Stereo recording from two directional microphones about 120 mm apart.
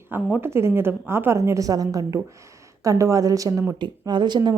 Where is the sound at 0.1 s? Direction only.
15° right (ahead or behind).